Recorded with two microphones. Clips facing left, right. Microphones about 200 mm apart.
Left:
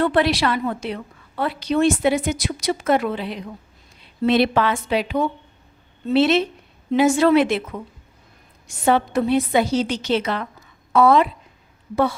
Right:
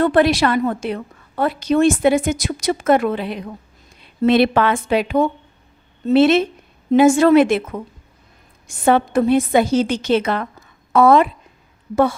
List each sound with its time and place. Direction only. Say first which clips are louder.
0.0 s a woman's voice: right 4 dB; 45° right (ahead or behind)